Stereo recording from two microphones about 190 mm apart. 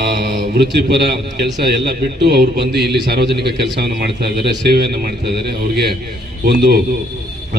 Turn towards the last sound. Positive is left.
turn(degrees=-60)  # may be behind; listen again after turning